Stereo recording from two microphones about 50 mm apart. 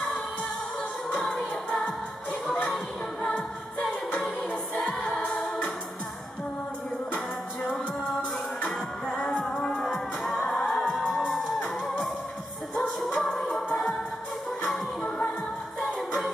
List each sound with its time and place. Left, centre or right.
1.1 s music: centre
4.5 s music: centre
7.6 s music: centre
8.5 s music: left
9.4 s music: centre
15.8 s music: centre